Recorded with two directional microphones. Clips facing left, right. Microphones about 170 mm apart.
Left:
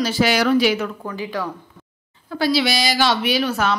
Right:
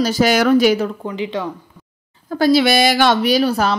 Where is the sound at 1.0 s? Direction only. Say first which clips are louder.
Right 3 dB; 20° right (ahead or behind).